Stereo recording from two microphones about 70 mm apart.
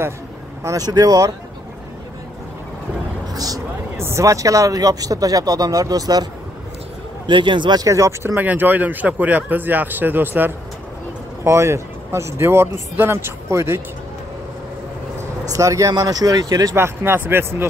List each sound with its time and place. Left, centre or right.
0.7 s speech: right
3.3 s speech: right
3.9 s speech: right
7.6 s speech: right
7.9 s speech: right
8.4 s speech: right
11.4 s speech: right
15.5 s speech: right
15.9 s speech: right
16.7 s speech: right